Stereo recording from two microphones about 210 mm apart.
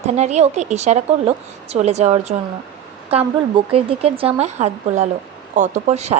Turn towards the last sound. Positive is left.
turn(degrees=-30)  # may be behind; listen again after turning